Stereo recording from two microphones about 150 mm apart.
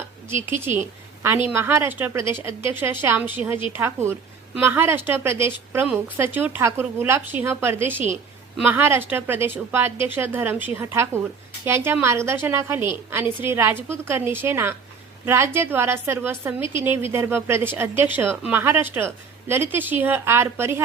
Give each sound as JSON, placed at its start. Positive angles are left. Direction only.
{"t": 0.5, "sound": "a woman's voice", "side_deg": -15}